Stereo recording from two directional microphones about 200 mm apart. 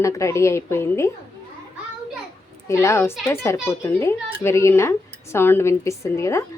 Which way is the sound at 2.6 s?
15° left (ahead or behind).